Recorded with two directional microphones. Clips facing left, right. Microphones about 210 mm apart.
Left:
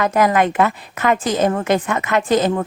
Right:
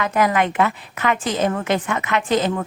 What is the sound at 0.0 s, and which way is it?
A woman's voice, 40° left (ahead or behind).